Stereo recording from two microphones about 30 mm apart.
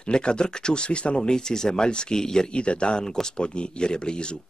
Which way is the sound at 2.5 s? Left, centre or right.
Left.